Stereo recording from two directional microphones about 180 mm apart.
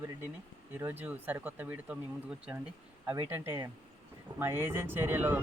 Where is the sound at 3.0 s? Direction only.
10° right (ahead or behind).